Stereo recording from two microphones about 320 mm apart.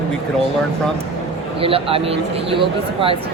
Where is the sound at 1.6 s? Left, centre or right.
Centre.